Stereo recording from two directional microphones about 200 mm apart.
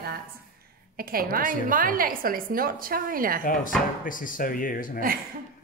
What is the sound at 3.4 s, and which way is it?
Speech, 45° left (ahead or behind).